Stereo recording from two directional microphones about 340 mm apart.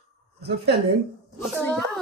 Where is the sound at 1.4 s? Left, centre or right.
Centre.